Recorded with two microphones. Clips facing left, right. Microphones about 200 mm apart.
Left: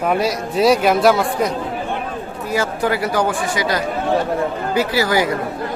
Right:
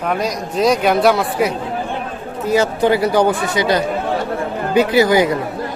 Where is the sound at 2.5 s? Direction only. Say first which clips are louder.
Right 5 dB; 20° right (ahead or behind).